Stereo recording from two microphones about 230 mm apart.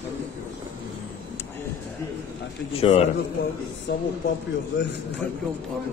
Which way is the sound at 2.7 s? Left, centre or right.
Left.